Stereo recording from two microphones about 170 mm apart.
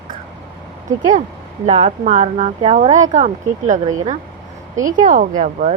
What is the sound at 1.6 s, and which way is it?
Speech, 40° right (ahead or behind).